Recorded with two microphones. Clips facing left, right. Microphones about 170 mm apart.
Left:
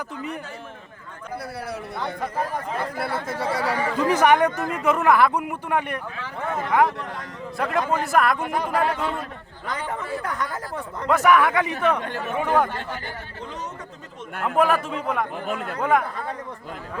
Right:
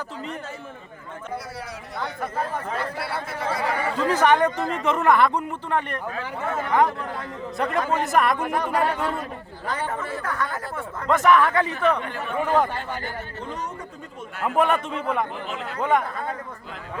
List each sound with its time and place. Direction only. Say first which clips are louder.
3.0 s speech: left 2 dB; 45° left (ahead or behind)
3.9 s speech: left 1 dB; 15° left (ahead or behind)
7.5 s speech: even; centre (ahead or behind)
10.2 s speech: right 1 dB; 15° left (ahead or behind)
14.4 s speech: left 1 dB; centre (ahead or behind)
15.4 s speech: left 4 dB; 50° left (ahead or behind)
15.8 s speech: even; centre (ahead or behind)